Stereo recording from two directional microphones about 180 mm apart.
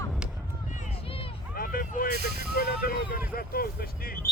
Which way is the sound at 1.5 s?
55° left (ahead or behind).